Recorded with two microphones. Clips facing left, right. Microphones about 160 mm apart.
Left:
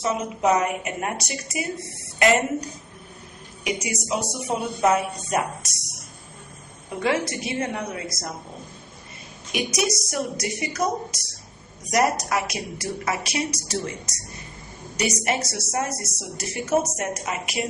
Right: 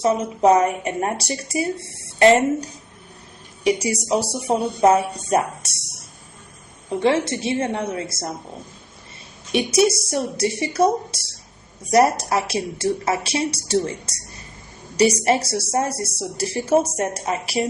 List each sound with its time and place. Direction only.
0.0 s a woman's voice: 30° right (ahead or behind)
7.0 s a woman's voice: 25° right (ahead or behind)
9.5 s a woman's voice: 30° right (ahead or behind)